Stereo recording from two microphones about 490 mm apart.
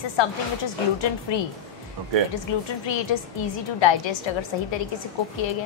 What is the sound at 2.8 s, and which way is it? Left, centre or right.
Speech, left.